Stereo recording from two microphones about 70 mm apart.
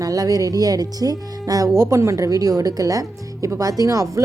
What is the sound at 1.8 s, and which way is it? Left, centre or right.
A woman's voice, right.